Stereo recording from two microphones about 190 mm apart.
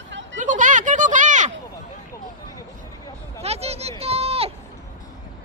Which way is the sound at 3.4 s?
35° right (ahead or behind).